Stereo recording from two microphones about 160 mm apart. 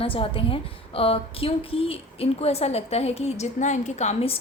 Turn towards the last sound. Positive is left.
turn(degrees=40)  # may be behind; listen again after turning